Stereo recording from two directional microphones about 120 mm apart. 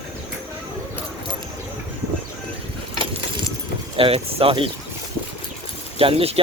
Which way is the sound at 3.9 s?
50° right (ahead or behind).